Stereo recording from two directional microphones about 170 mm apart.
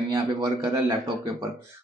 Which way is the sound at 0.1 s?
20° right (ahead or behind).